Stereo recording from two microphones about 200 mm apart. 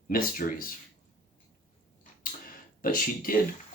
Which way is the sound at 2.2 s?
45° left (ahead or behind).